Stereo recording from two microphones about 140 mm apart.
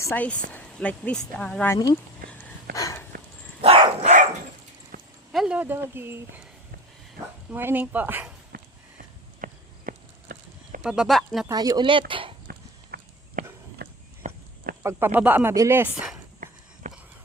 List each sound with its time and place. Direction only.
0.0 s speech: 15° left (ahead or behind)
1.7 s speech: 25° left (ahead or behind)
2.7 s a sound: 25° left (ahead or behind)
3.6 s dog: 45° right (ahead or behind)
5.3 s speech: 5° right (ahead or behind)
7.5 s speech: 15° right (ahead or behind)
9.4 s clip-clop: 85° right
10.8 s speech: 5° right (ahead or behind)
11.4 s speech: 25° right (ahead or behind)
12.5 s walk: 90° right
13.8 s a sound: 90° right
14.2 s a sound: 60° right (ahead or behind)
14.8 s speech: 15° right (ahead or behind)
16.8 s a sound: 60° right (ahead or behind)